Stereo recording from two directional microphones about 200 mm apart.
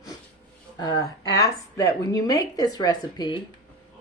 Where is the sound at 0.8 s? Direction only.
20° left (ahead or behind).